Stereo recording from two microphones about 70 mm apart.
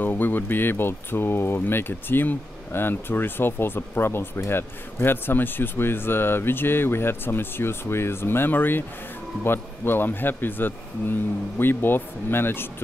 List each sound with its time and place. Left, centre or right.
0.0 s speech: left